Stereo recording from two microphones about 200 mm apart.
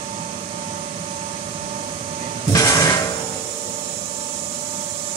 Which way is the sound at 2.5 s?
15° left (ahead or behind).